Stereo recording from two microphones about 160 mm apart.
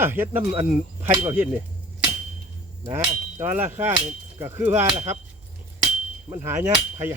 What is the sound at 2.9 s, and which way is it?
Speech, 40° right (ahead or behind).